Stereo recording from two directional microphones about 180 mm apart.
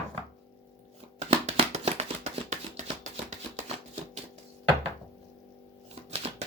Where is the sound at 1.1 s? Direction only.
40° right (ahead or behind).